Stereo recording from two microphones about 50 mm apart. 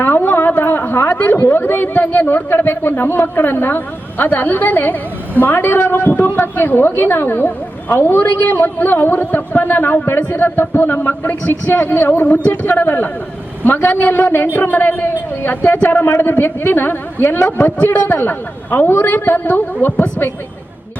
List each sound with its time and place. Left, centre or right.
0.0 s a sound: left
1.1 s a woman's voice: left
12.1 s a woman's voice: left